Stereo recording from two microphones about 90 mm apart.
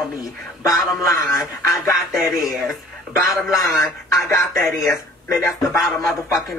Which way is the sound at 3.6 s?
35° left (ahead or behind).